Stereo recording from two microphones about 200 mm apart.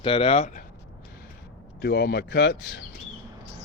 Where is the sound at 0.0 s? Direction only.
30° left (ahead or behind).